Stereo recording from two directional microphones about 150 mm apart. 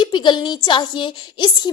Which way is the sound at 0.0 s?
30° left (ahead or behind).